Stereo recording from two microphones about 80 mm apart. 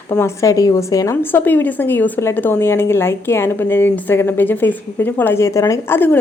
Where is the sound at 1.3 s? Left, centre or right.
Left.